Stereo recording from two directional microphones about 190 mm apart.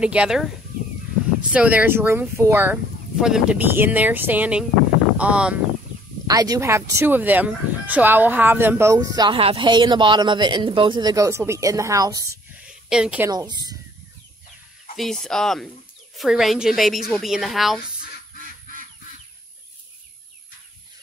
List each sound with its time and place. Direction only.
0.0 s a woman's voice: 5° right (ahead or behind)
1.5 s speech: 5° right (ahead or behind)
6.2 s speech: 20° right (ahead or behind)
12.6 s a sound: 5° right (ahead or behind)
13.3 s speech: 20° right (ahead or behind)
15.0 s a woman's voice: centre (ahead or behind)